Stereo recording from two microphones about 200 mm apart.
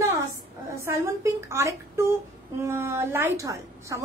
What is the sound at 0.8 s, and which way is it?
A woman's voice, 15° right (ahead or behind).